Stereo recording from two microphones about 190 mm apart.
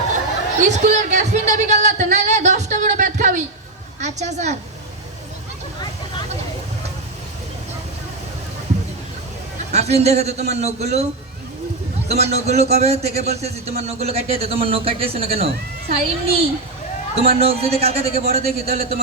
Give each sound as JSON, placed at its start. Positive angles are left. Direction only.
{"t": 0.6, "sound": "a sound", "side_deg": -40}
{"t": 4.0, "sound": "a woman's voice", "side_deg": -35}
{"t": 9.7, "sound": "a man's voice", "side_deg": -35}
{"t": 12.0, "sound": "a man's voice", "side_deg": -35}